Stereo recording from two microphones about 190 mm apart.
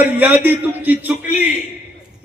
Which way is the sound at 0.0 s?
10° right (ahead or behind).